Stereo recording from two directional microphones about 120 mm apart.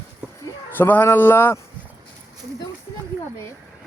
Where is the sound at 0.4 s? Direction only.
15° left (ahead or behind).